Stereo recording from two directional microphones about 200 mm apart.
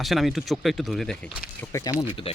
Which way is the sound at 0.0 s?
Centre (ahead or behind).